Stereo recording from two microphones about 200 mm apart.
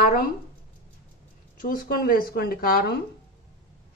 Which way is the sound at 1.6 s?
45° left (ahead or behind).